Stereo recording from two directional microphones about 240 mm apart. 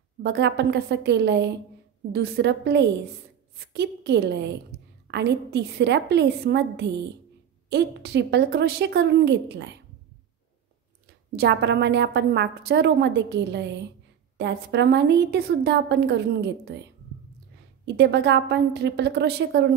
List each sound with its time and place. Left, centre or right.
0.2 s a woman's voice: right
11.3 s a woman's voice: right
17.8 s a woman's voice: right